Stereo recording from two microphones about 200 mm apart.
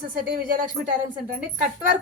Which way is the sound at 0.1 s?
45° right (ahead or behind).